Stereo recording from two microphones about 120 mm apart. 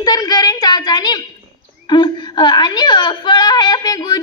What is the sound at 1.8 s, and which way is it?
A woman's voice, 40° left (ahead or behind).